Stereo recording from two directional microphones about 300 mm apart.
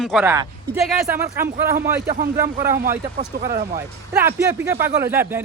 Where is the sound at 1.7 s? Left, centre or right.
Right.